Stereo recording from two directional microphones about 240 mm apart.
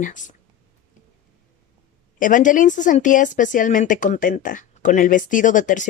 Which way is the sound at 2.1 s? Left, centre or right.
Left.